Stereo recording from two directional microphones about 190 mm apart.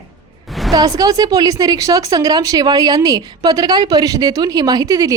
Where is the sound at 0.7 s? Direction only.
20° right (ahead or behind).